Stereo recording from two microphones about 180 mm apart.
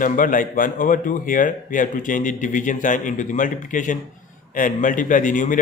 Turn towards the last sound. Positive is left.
turn(degrees=45)  # may be behind; listen again after turning